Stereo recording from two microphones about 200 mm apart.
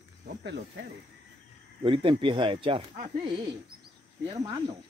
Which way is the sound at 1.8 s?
25° right (ahead or behind).